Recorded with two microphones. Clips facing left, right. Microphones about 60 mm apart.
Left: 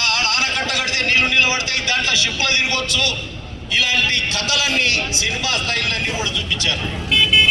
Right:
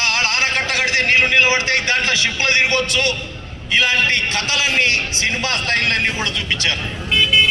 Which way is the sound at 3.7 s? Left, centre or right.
Right.